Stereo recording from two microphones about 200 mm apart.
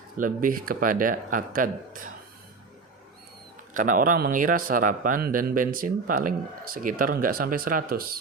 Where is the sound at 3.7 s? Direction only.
40° right (ahead or behind).